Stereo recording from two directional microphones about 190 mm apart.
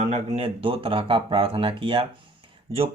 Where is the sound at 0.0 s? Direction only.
35° right (ahead or behind).